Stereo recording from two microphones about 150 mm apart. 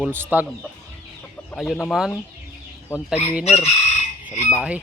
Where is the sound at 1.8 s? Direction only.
Centre (ahead or behind).